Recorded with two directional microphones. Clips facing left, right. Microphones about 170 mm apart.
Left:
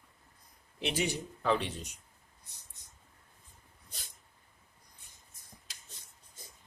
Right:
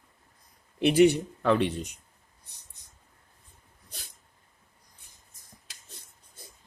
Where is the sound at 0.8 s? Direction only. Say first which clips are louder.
Right 14 dB; 60° right (ahead or behind).